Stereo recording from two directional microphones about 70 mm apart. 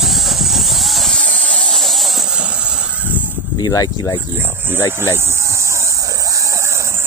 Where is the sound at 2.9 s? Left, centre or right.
Right.